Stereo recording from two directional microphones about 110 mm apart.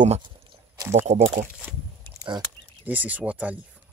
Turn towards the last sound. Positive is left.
turn(degrees=-15)  # may be behind; listen again after turning